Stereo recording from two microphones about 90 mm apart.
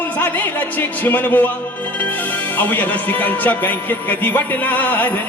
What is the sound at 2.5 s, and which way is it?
Music, 20° left (ahead or behind).